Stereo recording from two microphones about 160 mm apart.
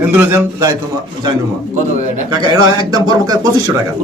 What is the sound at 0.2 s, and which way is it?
Speech, 15° right (ahead or behind).